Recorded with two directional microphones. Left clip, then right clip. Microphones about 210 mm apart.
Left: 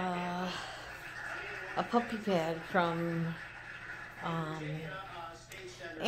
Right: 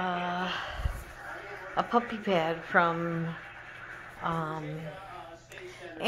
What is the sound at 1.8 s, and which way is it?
Speech, 15° right (ahead or behind).